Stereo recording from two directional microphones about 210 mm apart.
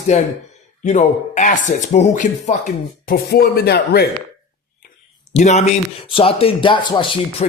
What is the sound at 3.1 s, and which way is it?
Speech, 50° left (ahead or behind).